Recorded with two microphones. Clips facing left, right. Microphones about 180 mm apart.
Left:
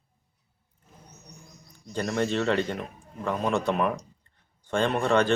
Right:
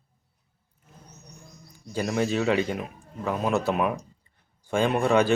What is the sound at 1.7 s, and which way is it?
Speech, 5° right (ahead or behind).